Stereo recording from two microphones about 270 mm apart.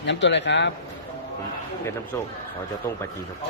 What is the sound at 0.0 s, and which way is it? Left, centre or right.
Speech, left.